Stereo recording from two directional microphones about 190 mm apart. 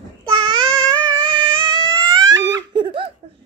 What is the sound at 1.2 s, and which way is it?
Baby cry, 25° right (ahead or behind).